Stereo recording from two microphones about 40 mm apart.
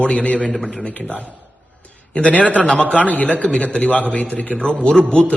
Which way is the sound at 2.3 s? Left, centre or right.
Left.